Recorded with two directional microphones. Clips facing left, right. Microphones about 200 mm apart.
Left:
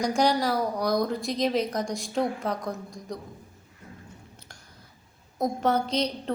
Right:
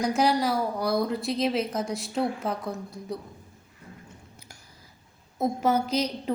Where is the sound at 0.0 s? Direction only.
5° right (ahead or behind).